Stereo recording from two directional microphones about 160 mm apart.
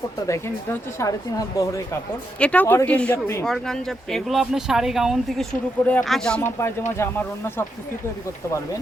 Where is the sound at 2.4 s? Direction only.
10° left (ahead or behind).